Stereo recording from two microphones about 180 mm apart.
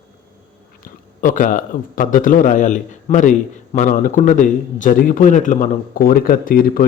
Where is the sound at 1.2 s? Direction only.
50° left (ahead or behind).